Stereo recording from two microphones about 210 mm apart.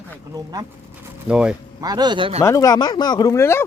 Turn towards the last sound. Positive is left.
turn(degrees=10)  # may be behind; listen again after turning